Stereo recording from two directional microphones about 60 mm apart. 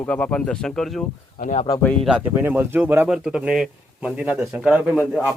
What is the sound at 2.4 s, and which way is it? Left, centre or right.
Speech, right.